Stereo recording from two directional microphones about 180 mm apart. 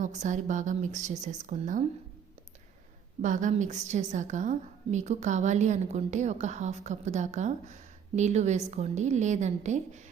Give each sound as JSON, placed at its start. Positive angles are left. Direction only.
{"t": 0.0, "sound": "a woman's voice", "side_deg": -40}
{"t": 3.2, "sound": "a woman's voice", "side_deg": -45}